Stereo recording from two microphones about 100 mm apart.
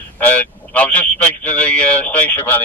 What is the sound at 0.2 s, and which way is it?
Speech, 15° left (ahead or behind).